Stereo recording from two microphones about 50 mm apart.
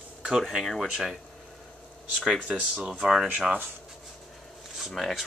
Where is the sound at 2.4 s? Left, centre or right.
Centre.